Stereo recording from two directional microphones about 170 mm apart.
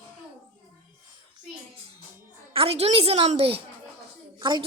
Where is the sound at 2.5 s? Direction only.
35° right (ahead or behind).